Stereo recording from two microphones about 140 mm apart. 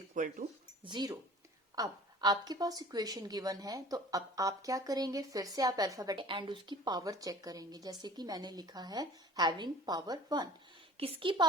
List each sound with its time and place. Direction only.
0.1 s speech: 65° right (ahead or behind)
0.9 s a woman's voice: 30° right (ahead or behind)
10.9 s a woman's voice: 40° right (ahead or behind)